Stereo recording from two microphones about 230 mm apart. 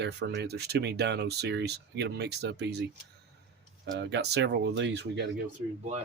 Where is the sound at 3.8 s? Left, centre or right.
Right.